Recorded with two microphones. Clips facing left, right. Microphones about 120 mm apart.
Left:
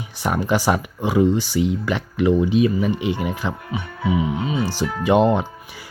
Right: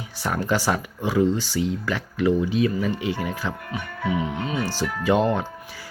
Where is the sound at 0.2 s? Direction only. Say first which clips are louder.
Left 3 dB; 15° left (ahead or behind).